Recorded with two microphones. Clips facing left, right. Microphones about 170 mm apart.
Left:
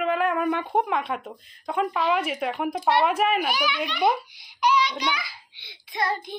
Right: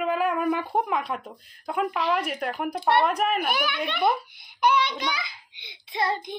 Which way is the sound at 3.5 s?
55° right (ahead or behind).